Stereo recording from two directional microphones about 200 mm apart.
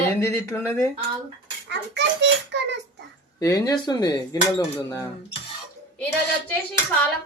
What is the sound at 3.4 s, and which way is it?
Speech, 15° left (ahead or behind).